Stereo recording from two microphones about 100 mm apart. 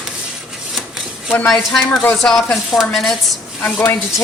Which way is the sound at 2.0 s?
20° left (ahead or behind).